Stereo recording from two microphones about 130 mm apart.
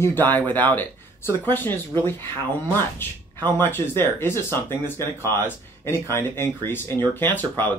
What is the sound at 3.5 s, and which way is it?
Speech, 15° left (ahead or behind).